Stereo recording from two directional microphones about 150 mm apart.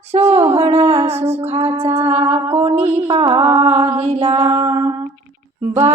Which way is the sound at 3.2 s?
40° right (ahead or behind).